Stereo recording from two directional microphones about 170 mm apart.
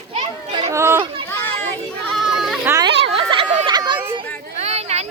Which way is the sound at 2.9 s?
90° right.